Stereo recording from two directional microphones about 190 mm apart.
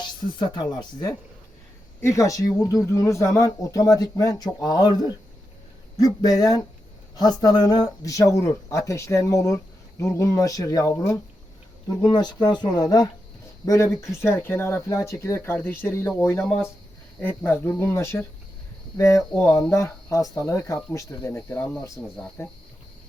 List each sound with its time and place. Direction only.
0.0 s speech: 25° left (ahead or behind)